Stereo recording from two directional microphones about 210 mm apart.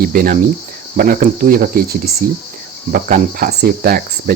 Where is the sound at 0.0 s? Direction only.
45° right (ahead or behind).